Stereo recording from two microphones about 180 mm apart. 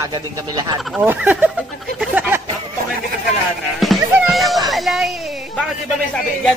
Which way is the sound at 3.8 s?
Centre (ahead or behind).